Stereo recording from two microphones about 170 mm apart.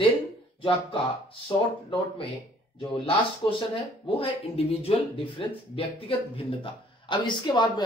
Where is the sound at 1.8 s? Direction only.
30° left (ahead or behind).